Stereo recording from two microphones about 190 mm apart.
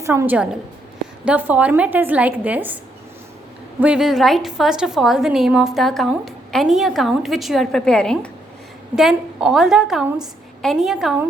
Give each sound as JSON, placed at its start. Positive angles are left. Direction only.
{"t": 0.0, "sound": "a woman's voice", "side_deg": -15}
{"t": 3.8, "sound": "a woman's voice", "side_deg": -5}